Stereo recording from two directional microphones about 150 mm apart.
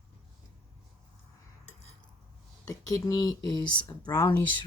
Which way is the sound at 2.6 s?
20° left (ahead or behind).